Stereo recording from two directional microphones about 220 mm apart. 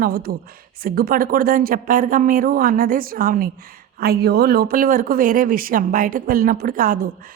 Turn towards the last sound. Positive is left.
turn(degrees=-40)  # may be behind; listen again after turning